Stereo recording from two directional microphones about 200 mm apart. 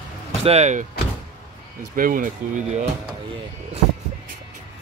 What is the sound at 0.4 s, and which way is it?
Speech, 30° right (ahead or behind).